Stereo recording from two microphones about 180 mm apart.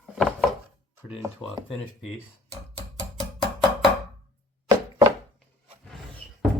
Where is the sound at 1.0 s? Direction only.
15° right (ahead or behind).